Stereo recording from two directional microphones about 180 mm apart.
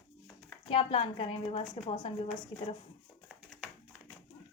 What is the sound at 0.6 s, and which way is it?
A woman's voice, 30° left (ahead or behind).